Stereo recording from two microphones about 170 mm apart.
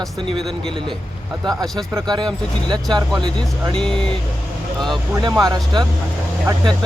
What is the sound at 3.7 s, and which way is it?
Speech, 5° left (ahead or behind).